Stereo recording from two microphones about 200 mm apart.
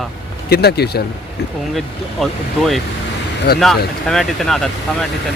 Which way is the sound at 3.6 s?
Centre (ahead or behind).